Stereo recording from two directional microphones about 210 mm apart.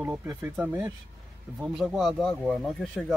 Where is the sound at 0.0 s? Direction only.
10° right (ahead or behind).